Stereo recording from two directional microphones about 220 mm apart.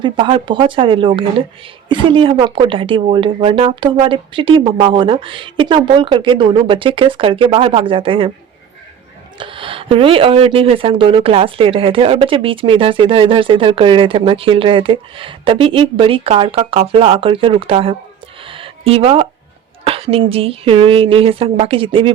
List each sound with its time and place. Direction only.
0.0 s speech: 20° right (ahead or behind)
9.4 s speech: 25° right (ahead or behind)
18.4 s a sound: 25° right (ahead or behind)
19.8 s speech: 25° right (ahead or behind)